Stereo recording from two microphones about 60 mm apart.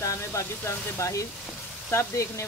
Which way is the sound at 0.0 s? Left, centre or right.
Left.